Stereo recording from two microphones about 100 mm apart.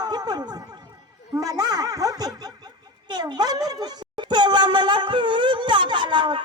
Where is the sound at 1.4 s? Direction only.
40° right (ahead or behind).